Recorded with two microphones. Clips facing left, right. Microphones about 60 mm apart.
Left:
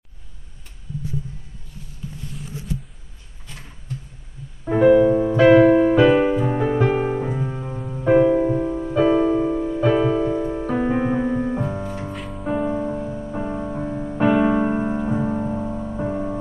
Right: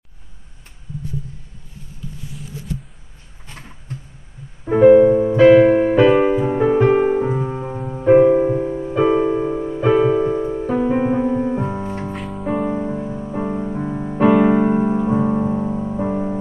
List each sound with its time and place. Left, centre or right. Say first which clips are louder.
4.7 s music: right 4 dB; right
11.6 s music: right 2 dB; centre
12.1 s music: right 2 dB; centre
12.6 s music: right 1 dB; centre
13.9 s music: right 4 dB; centre
14.7 s piano: right 5 dB; centre
15.1 s music: right 5 dB; centre